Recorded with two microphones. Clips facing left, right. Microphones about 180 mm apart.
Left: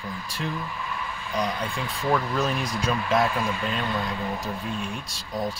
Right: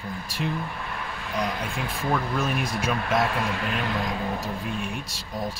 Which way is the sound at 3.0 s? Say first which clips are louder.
Left 2 dB; 65° right (ahead or behind).